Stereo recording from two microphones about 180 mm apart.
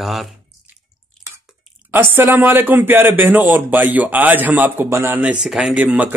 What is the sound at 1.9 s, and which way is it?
Speech, 10° right (ahead or behind).